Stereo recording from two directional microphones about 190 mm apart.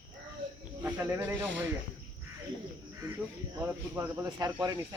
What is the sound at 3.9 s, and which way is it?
Speech, 15° right (ahead or behind).